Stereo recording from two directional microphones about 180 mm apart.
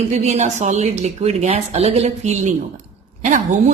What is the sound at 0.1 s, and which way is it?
Speech, 40° right (ahead or behind).